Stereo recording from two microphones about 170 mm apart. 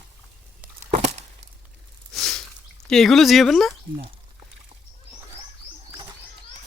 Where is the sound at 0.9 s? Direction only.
45° right (ahead or behind).